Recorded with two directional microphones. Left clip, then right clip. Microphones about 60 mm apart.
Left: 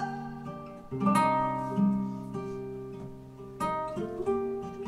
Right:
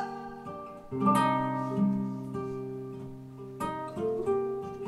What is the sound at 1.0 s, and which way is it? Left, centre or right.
Music, centre.